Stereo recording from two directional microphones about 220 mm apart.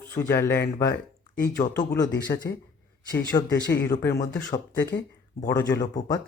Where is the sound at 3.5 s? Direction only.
50° left (ahead or behind).